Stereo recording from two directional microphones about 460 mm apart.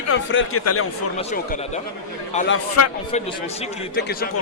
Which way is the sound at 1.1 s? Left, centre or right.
Centre.